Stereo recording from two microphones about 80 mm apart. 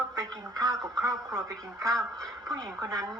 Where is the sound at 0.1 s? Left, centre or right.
Right.